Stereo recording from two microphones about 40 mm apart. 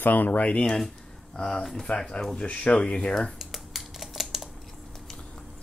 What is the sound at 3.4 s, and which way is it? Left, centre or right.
Typing, centre.